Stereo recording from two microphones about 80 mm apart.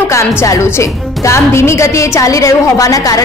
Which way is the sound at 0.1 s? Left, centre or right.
Left.